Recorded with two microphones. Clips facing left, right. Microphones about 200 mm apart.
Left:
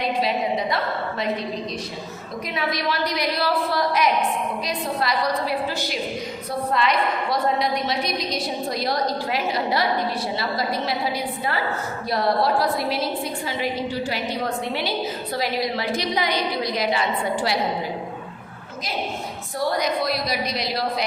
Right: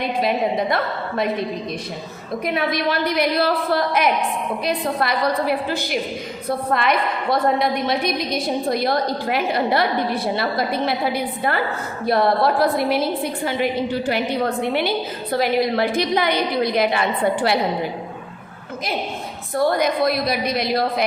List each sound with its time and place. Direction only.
0.2 s a woman's voice: 55° right (ahead or behind)
2.5 s a woman's voice: 55° right (ahead or behind)
19.5 s a woman's voice: 55° right (ahead or behind)